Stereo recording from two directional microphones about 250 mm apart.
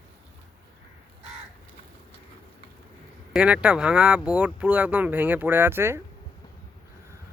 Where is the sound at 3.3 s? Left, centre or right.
Centre.